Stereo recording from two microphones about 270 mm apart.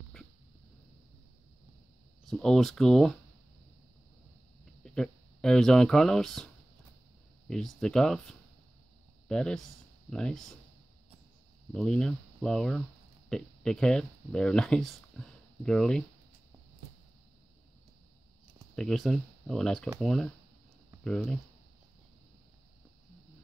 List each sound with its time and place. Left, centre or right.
2.2 s speech: centre
4.8 s speech: centre
7.4 s speech: centre
11.7 s speech: centre
18.8 s speech: centre